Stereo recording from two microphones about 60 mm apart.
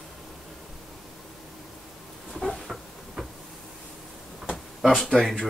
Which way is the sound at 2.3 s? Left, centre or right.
Centre.